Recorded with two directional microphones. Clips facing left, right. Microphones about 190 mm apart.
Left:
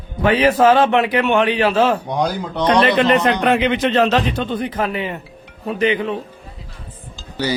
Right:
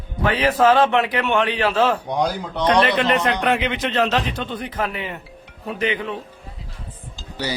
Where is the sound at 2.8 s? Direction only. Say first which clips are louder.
Left 5 dB; 25° left (ahead or behind).